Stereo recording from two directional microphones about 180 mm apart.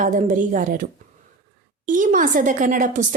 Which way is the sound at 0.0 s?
45° right (ahead or behind).